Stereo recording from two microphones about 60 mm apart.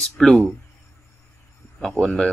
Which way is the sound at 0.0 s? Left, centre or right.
Centre.